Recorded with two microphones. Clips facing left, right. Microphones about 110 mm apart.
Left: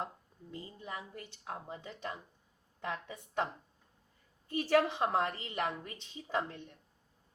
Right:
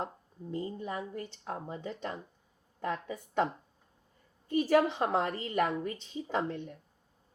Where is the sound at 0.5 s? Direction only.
45° right (ahead or behind).